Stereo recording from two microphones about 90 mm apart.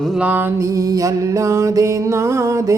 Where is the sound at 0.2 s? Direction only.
20° right (ahead or behind).